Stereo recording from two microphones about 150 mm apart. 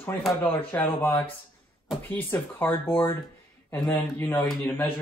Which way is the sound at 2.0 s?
15° left (ahead or behind).